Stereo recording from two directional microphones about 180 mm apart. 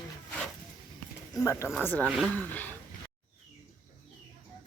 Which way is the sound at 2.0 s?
5° right (ahead or behind).